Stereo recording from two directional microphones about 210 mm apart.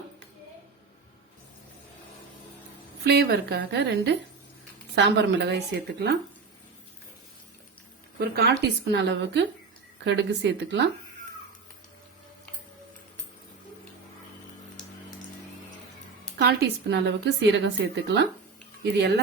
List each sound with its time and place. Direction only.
3.0 s a woman's voice: 50° right (ahead or behind)
8.2 s a woman's voice: 50° right (ahead or behind)
16.4 s a woman's voice: 55° right (ahead or behind)